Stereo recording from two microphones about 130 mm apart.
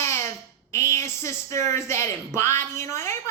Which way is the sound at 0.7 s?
20° left (ahead or behind).